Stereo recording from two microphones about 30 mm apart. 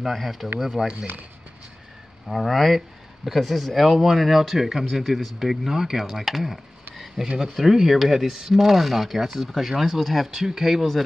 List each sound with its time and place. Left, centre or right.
0.3 s speech: centre
2.2 s speech: centre
4.6 s speech: centre
5.4 s speech: centre